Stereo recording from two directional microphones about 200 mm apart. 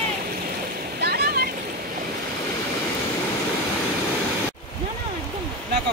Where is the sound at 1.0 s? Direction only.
50° right (ahead or behind).